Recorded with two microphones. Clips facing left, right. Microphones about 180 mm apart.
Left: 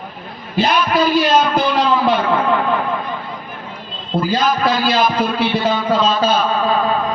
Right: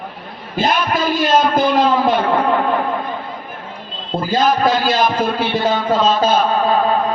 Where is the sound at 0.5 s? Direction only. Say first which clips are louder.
Left 2 dB; 45° right (ahead or behind).